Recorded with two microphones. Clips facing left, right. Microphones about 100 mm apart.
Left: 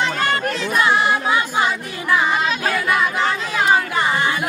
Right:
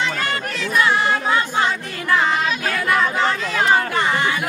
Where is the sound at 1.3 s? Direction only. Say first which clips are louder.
Even; 10° left (ahead or behind).